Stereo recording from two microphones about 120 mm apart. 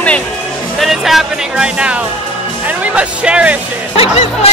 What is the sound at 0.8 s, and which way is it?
Speech, centre (ahead or behind).